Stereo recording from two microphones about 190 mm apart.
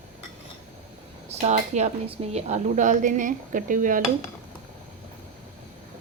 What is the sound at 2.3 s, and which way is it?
Dishes, 35° right (ahead or behind).